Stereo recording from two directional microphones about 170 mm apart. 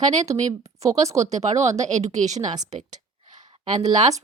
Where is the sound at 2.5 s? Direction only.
25° right (ahead or behind).